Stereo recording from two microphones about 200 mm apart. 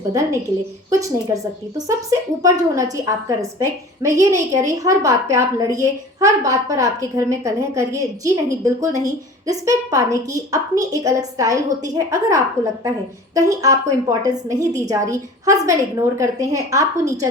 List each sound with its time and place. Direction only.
0.1 s a woman's voice: 15° right (ahead or behind)